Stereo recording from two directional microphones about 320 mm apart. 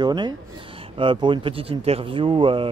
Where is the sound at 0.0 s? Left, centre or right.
Centre.